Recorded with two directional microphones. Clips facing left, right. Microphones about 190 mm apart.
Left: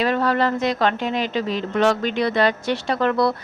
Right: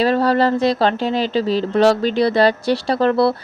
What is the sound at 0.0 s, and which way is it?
Speech, 35° right (ahead or behind).